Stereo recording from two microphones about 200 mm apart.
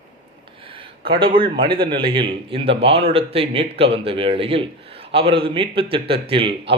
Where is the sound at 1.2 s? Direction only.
25° right (ahead or behind).